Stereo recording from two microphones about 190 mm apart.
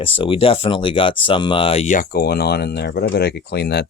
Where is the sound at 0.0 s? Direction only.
25° left (ahead or behind).